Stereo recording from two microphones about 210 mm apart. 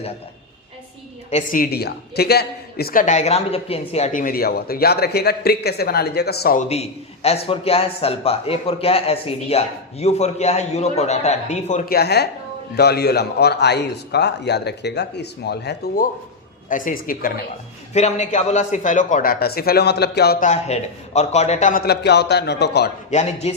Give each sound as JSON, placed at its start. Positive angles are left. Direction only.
{"t": 1.3, "sound": "a woman's voice", "side_deg": 40}
{"t": 6.7, "sound": "a man's voice", "side_deg": 30}
{"t": 16.6, "sound": "a man's voice", "side_deg": 40}
{"t": 23.1, "sound": "a man's voice", "side_deg": 30}